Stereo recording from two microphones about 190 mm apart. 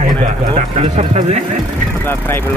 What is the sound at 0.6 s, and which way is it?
Speech, 35° right (ahead or behind).